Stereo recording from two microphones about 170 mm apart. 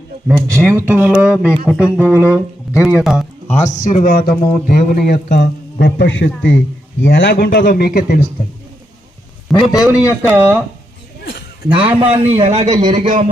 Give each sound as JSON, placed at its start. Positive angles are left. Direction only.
{"t": 0.3, "sound": "speech", "side_deg": -15}
{"t": 3.4, "sound": "speech", "side_deg": 15}
{"t": 3.7, "sound": "a man's voice", "side_deg": 45}
{"t": 9.5, "sound": "a man's voice", "side_deg": 20}
{"t": 9.8, "sound": "speech", "side_deg": -5}
{"t": 11.7, "sound": "a man's voice", "side_deg": -30}
{"t": 12.9, "sound": "a man's voice", "side_deg": -50}